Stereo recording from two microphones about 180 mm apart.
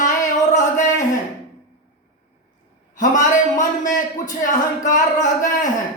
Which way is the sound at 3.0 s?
45° left (ahead or behind).